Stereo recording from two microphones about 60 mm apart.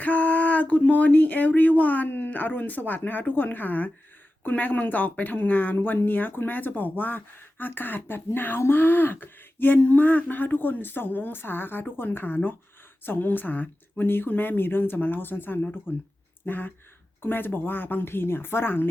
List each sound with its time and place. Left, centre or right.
0.0 s speech: left